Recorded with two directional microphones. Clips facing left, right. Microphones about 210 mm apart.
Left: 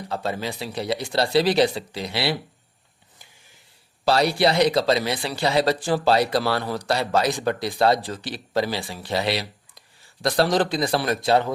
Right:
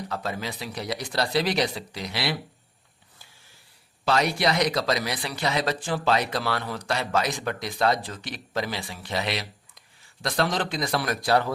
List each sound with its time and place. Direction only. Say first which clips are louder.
0.1 s speech: left 7 dB; 30° left (ahead or behind)
4.0 s a man's voice: left 4 dB; 35° left (ahead or behind)